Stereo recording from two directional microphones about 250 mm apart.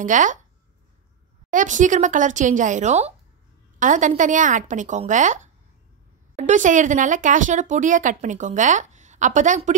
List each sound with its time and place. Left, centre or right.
0.0 s speech: right
1.5 s speech: right